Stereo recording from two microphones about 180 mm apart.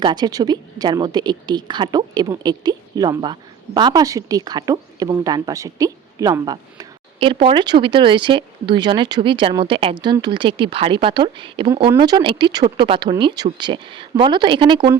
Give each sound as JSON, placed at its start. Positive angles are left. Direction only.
{"t": 0.0, "sound": "a woman's voice", "side_deg": -25}